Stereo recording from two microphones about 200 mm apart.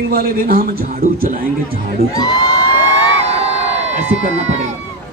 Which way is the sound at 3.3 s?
30° right (ahead or behind).